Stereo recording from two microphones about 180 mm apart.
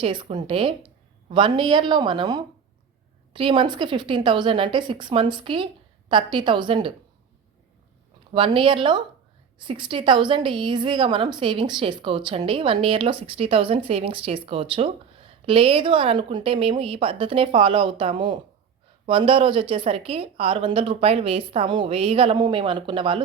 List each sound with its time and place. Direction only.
0.0 s a woman's voice: 30° right (ahead or behind)
8.3 s a woman's voice: 30° right (ahead or behind)